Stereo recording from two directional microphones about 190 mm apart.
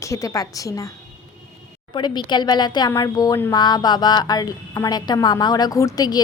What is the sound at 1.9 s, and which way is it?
Speech, 25° left (ahead or behind).